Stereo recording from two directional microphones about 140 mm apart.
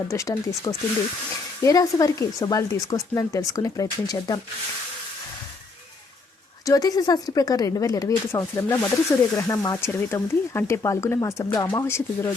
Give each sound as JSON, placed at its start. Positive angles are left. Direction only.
{"t": 0.1, "sound": "speech", "side_deg": 20}
{"t": 6.7, "sound": "speech", "side_deg": 25}